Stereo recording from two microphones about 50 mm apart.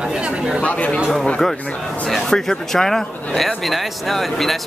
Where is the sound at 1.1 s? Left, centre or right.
Centre.